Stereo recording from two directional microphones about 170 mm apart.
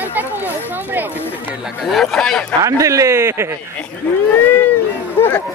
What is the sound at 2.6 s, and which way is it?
Speech, 20° right (ahead or behind).